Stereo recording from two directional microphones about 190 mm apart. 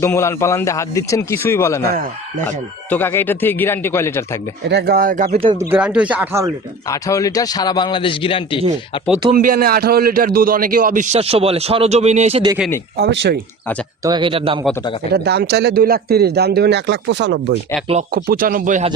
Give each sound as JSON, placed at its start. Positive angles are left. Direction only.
{"t": 0.0, "sound": "speech", "side_deg": 15}
{"t": 2.9, "sound": "speech", "side_deg": 10}
{"t": 4.7, "sound": "a man's voice", "side_deg": -60}
{"t": 5.4, "sound": "speech", "side_deg": -30}
{"t": 5.7, "sound": "speech", "side_deg": -5}
{"t": 6.8, "sound": "a man's voice", "side_deg": 15}
{"t": 9.3, "sound": "a man's voice", "side_deg": -45}
{"t": 13.0, "sound": "speech", "side_deg": -55}
{"t": 14.0, "sound": "speech", "side_deg": -25}
{"t": 15.1, "sound": "speech", "side_deg": -60}
{"t": 18.1, "sound": "a man's voice", "side_deg": -50}